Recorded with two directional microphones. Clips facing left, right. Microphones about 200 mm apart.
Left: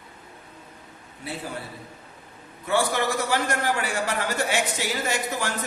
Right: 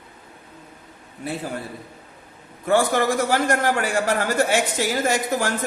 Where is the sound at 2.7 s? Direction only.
50° right (ahead or behind).